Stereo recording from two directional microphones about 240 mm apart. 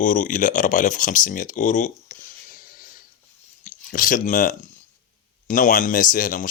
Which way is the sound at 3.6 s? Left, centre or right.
Left.